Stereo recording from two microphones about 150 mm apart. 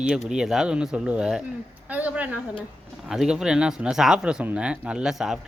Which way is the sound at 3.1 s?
5° right (ahead or behind).